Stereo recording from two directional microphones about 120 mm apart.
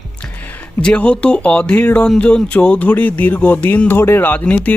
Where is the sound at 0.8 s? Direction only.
10° left (ahead or behind).